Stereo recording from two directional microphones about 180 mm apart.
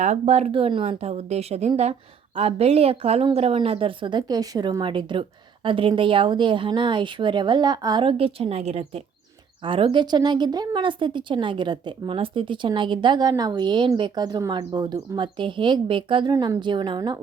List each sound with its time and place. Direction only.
0.0 s a woman's voice: 40° right (ahead or behind)